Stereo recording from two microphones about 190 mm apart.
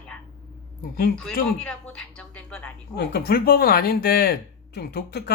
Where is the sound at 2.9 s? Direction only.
60° left (ahead or behind).